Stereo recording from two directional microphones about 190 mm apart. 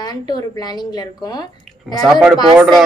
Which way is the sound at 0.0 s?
20° left (ahead or behind).